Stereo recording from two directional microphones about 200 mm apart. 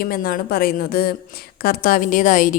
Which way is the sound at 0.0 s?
50° left (ahead or behind).